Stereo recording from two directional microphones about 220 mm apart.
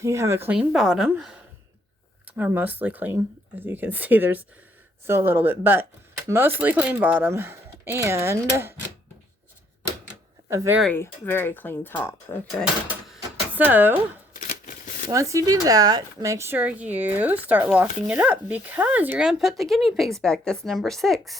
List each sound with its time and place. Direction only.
0.0 s speech: 15° right (ahead or behind)
10.5 s speech: 15° right (ahead or behind)
10.8 s speech: 5° left (ahead or behind)
13.6 s speech: 10° right (ahead or behind)
14.3 s a sound: 35° left (ahead or behind)
15.1 s speech: 15° right (ahead or behind)